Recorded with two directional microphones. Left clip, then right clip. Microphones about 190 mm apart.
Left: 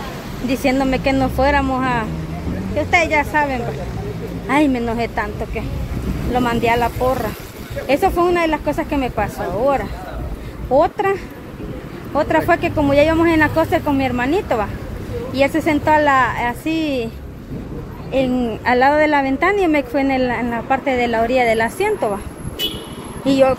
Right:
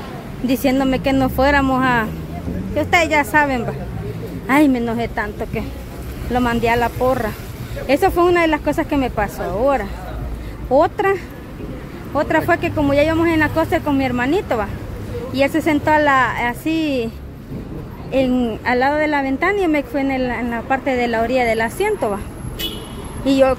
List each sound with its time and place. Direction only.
0.5 s a woman's voice: 15° right (ahead or behind)
12.2 s a woman's voice: 5° right (ahead or behind)
13.7 s a woman's voice: 10° right (ahead or behind)
18.1 s a woman's voice: 15° right (ahead or behind)
18.6 s a woman's voice: centre (ahead or behind)
23.2 s speech: 10° right (ahead or behind)